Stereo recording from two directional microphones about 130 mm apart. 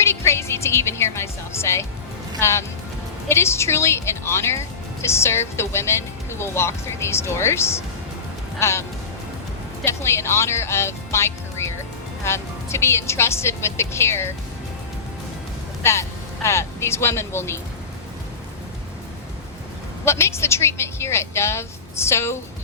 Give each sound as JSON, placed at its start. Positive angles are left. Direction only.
{"t": 0.0, "sound": "a woman's voice", "side_deg": 20}
{"t": 9.8, "sound": "a woman's voice", "side_deg": 20}
{"t": 15.8, "sound": "speech", "side_deg": 20}
{"t": 20.1, "sound": "a woman's voice", "side_deg": 20}